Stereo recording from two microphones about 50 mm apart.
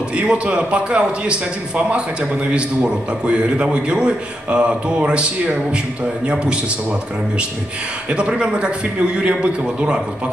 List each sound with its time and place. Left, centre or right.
0.1 s a man's voice: right